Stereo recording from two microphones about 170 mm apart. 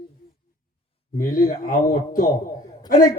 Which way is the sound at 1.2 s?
55° left (ahead or behind).